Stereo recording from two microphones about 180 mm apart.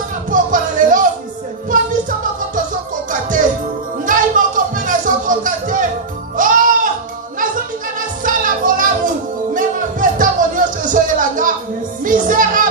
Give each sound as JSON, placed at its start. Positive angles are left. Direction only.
{"t": 0.3, "sound": "music", "side_deg": -45}
{"t": 3.1, "sound": "music", "side_deg": -45}